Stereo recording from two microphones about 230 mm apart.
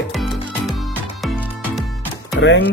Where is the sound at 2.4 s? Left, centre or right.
Left.